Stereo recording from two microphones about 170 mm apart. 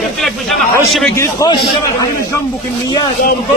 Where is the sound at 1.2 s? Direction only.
20° left (ahead or behind).